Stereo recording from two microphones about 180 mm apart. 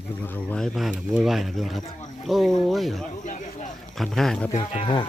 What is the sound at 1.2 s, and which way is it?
Speech, centre (ahead or behind).